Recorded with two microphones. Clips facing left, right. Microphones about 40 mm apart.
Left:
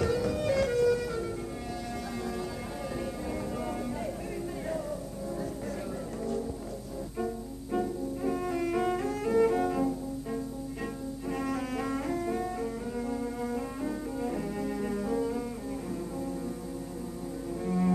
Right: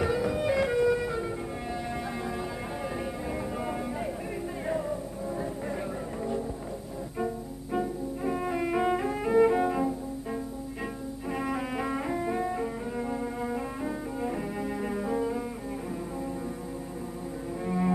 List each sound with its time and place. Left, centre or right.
0.0 s music: centre
4.6 s music: right
7.7 s music: centre
11.3 s double bass: centre
17.6 s cello: centre